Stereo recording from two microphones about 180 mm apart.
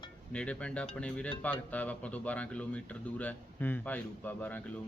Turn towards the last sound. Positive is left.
turn(degrees=10)  # may be behind; listen again after turning